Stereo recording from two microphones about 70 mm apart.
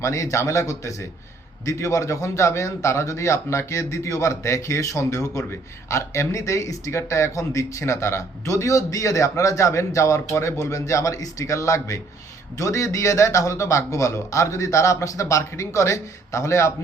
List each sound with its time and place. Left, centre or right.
0.0 s speech: left